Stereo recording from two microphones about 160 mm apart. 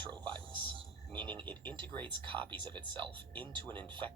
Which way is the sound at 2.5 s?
30° right (ahead or behind).